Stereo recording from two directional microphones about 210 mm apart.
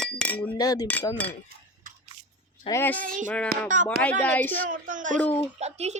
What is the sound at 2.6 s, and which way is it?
Speech, 10° left (ahead or behind).